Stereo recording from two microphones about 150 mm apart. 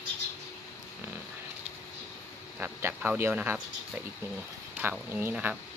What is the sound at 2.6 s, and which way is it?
Speech, 10° right (ahead or behind).